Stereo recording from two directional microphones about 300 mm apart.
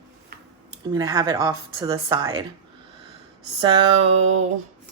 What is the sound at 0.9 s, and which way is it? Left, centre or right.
Speech, centre.